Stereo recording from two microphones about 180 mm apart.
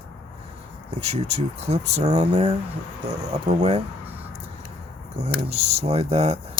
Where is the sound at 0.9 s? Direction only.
35° right (ahead or behind).